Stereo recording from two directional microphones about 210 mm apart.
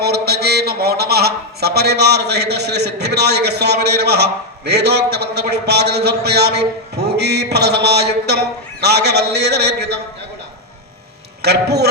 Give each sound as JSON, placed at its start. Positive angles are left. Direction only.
{"t": 0.0, "sound": "a man's voice", "side_deg": -50}
{"t": 11.4, "sound": "a man's voice", "side_deg": -50}